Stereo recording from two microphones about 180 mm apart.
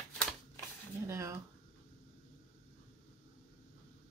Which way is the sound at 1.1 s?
15° right (ahead or behind).